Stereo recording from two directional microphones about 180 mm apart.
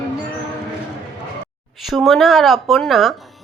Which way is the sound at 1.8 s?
Centre (ahead or behind).